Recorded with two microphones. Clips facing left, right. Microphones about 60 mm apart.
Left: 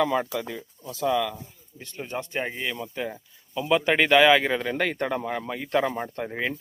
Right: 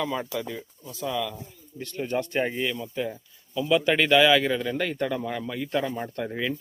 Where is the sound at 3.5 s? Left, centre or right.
Left.